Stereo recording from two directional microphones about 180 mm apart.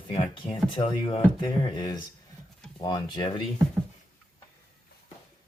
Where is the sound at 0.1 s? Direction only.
30° left (ahead or behind).